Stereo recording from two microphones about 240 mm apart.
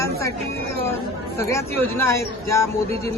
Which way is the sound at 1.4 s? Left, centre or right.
Centre.